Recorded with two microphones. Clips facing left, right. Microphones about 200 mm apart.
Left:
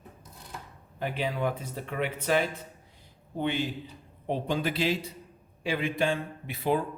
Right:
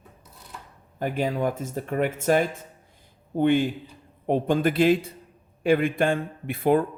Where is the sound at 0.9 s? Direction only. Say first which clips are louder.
Right 5 dB; 45° right (ahead or behind).